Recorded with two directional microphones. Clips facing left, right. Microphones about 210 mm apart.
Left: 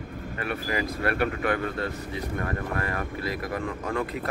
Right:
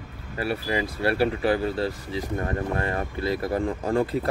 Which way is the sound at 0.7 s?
30° right (ahead or behind).